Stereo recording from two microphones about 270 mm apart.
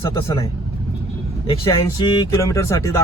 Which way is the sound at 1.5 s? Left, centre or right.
Centre.